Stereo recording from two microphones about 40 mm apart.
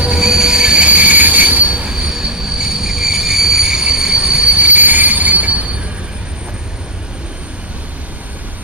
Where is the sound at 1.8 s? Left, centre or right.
Centre.